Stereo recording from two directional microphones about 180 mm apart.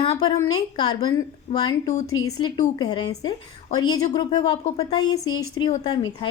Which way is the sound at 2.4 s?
25° left (ahead or behind).